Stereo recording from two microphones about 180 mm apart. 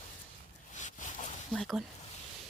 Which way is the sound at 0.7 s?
45° left (ahead or behind).